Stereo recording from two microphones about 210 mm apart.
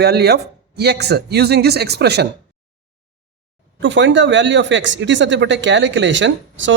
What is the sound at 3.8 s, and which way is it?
A woman's voice, 60° right (ahead or behind).